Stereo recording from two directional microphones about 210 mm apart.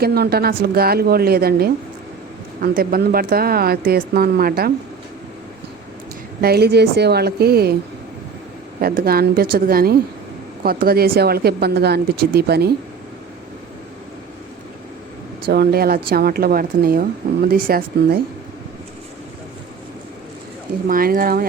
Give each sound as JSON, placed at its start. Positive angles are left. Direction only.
{"t": 0.0, "sound": "a woman's voice", "side_deg": -50}
{"t": 6.4, "sound": "a woman's voice", "side_deg": -50}
{"t": 8.8, "sound": "a woman's voice", "side_deg": -45}
{"t": 15.4, "sound": "a woman's voice", "side_deg": -50}
{"t": 20.8, "sound": "a woman's voice", "side_deg": -40}